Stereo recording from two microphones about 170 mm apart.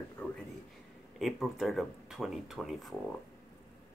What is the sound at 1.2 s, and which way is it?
Speech, centre (ahead or behind).